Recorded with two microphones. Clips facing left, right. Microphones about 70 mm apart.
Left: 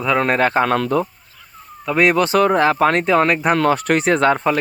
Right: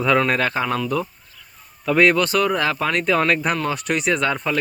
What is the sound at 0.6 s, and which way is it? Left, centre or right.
Speech, left.